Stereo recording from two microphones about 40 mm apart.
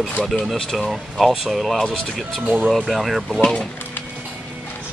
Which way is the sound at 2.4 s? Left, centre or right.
Right.